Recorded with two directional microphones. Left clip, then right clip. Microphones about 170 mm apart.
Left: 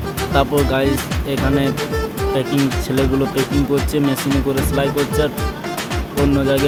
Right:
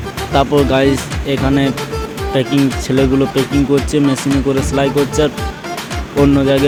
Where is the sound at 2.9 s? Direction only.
20° right (ahead or behind).